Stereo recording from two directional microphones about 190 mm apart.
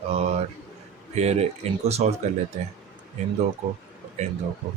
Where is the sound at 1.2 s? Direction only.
35° right (ahead or behind).